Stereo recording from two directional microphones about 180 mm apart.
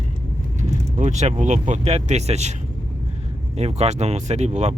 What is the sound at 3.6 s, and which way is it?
Speech, 35° right (ahead or behind).